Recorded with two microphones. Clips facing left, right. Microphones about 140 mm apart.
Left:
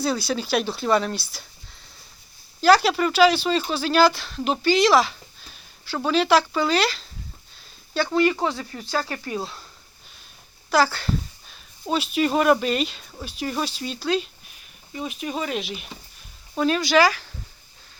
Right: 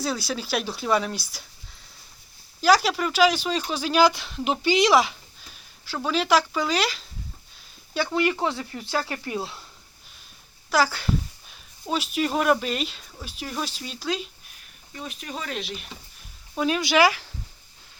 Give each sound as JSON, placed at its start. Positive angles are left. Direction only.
{"t": 0.0, "sound": "speech", "side_deg": -5}
{"t": 2.6, "sound": "speech", "side_deg": -5}
{"t": 5.5, "sound": "speech", "side_deg": -5}
{"t": 8.1, "sound": "speech", "side_deg": -15}
{"t": 10.7, "sound": "speech", "side_deg": -10}
{"t": 14.9, "sound": "speech", "side_deg": 10}
{"t": 16.6, "sound": "speech", "side_deg": -10}
{"t": 16.8, "sound": "speech", "side_deg": -20}